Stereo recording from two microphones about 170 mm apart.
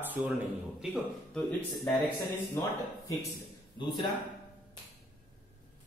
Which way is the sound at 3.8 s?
30° left (ahead or behind).